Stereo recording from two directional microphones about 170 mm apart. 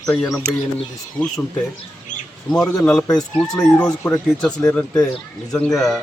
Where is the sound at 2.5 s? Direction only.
5° left (ahead or behind).